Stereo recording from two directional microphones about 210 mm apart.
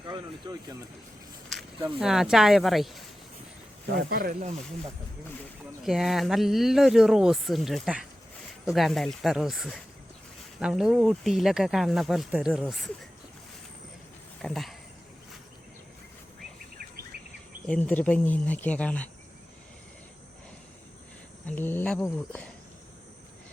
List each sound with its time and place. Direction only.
0.0 s speech: 20° right (ahead or behind)
2.0 s speech: centre (ahead or behind)
3.8 s speech: 45° right (ahead or behind)
5.8 s speech: centre (ahead or behind)
14.4 s speech: centre (ahead or behind)
16.7 s a sound: 45° right (ahead or behind)
17.7 s speech: 5° left (ahead or behind)
21.4 s speech: 10° left (ahead or behind)